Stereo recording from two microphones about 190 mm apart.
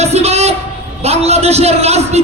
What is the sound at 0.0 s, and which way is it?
A man's voice, 35° right (ahead or behind).